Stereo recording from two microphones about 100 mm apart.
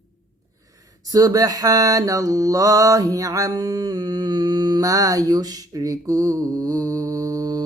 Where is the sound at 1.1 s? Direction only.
40° right (ahead or behind).